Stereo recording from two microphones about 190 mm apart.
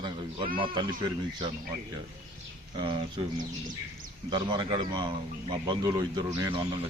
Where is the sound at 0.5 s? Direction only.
25° right (ahead or behind).